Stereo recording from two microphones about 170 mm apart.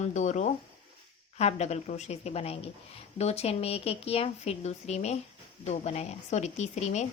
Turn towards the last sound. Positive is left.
turn(degrees=40)  # may be behind; listen again after turning